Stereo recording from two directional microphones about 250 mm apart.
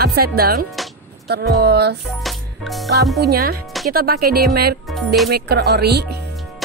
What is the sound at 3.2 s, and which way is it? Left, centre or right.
Speech, right.